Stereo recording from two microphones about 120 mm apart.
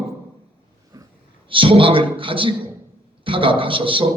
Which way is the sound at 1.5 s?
45° right (ahead or behind).